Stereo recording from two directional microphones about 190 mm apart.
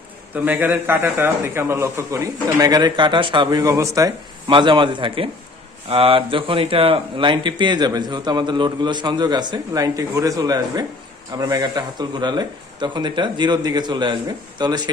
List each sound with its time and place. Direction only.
0.5 s a man's voice: 10° right (ahead or behind)